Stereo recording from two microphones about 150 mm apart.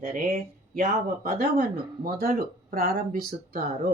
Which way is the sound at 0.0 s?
60° right (ahead or behind).